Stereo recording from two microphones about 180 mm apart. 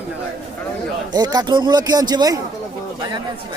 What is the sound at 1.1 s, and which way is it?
Speech, 20° right (ahead or behind).